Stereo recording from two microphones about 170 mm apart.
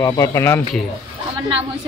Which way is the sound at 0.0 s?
20° left (ahead or behind).